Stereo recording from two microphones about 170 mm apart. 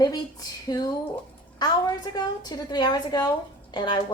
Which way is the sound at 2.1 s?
25° left (ahead or behind).